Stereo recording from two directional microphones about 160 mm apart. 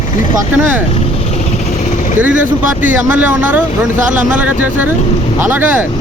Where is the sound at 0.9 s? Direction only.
45° left (ahead or behind).